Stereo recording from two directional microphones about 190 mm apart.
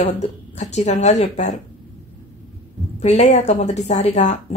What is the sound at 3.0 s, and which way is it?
A woman's voice, 35° left (ahead or behind).